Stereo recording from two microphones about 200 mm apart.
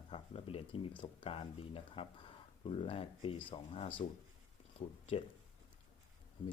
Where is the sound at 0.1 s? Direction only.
30° left (ahead or behind).